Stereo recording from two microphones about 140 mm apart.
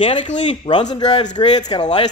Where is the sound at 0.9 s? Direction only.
35° left (ahead or behind).